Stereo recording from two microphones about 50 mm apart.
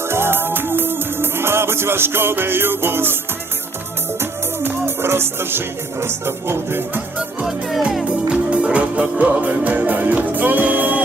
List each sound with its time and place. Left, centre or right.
0.0 s music: right
4.2 s music: right
8.0 s music: right